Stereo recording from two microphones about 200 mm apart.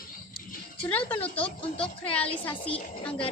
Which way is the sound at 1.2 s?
25° left (ahead or behind).